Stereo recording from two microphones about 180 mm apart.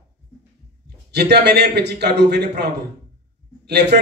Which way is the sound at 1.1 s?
65° right (ahead or behind).